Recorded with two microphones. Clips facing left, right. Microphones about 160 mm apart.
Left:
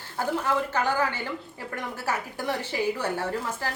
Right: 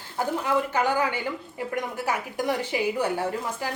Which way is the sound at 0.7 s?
15° right (ahead or behind).